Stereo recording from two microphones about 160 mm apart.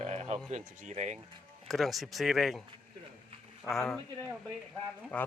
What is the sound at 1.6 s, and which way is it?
Speech, centre (ahead or behind).